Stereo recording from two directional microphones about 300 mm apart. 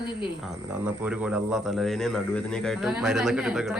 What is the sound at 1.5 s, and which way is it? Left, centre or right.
Speech, centre.